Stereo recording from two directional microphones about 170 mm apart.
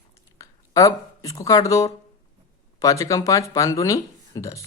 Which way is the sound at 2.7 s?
20° left (ahead or behind).